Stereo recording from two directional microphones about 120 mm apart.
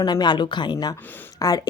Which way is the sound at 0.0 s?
40° left (ahead or behind).